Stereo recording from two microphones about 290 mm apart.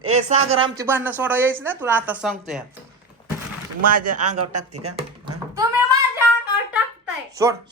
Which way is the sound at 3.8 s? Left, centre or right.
Right.